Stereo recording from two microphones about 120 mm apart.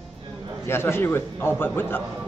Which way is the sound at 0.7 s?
20° left (ahead or behind).